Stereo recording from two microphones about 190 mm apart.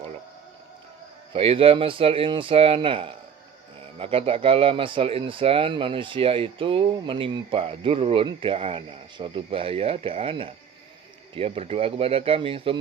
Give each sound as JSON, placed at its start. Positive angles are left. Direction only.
{"t": 1.3, "sound": "speech", "side_deg": -30}